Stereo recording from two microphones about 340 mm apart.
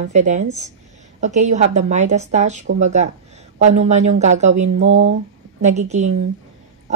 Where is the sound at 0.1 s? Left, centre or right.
Right.